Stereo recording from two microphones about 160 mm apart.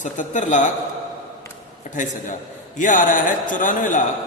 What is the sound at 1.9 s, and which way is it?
A man's voice, 55° left (ahead or behind).